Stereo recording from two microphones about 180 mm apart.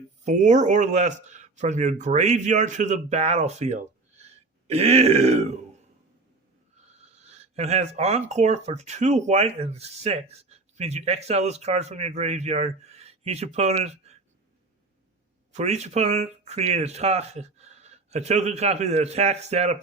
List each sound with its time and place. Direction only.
0.3 s speech: 40° right (ahead or behind)
7.2 s speech: 35° right (ahead or behind)
15.5 s speech: 40° right (ahead or behind)